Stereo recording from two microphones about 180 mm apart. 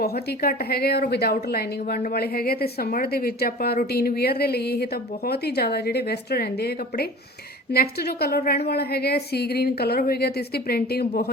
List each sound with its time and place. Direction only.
0.0 s a woman's voice: 60° left (ahead or behind)